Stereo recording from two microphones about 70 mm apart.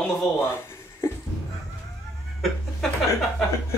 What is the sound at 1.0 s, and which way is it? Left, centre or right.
Music, left.